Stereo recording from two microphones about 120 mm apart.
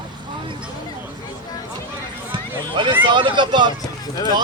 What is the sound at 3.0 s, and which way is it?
Speech, 40° right (ahead or behind).